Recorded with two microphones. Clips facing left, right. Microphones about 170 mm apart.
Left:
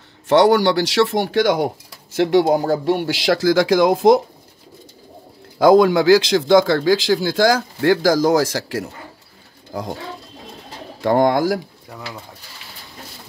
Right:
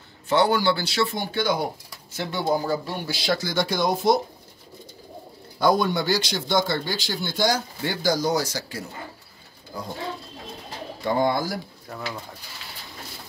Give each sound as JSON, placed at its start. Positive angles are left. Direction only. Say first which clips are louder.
{"t": 0.3, "sound": "speech", "louder": "left 7 dB", "side_deg": 80}
{"t": 2.9, "sound": "speech", "louder": "left 9 dB", "side_deg": 80}
{"t": 5.6, "sound": "speech", "louder": "left 9 dB", "side_deg": 90}
{"t": 11.0, "sound": "speech", "louder": "left 7 dB", "side_deg": 90}